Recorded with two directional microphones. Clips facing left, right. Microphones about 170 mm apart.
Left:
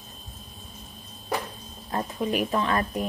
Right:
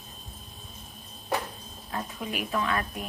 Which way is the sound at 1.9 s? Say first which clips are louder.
Left 7 dB; 40° left (ahead or behind).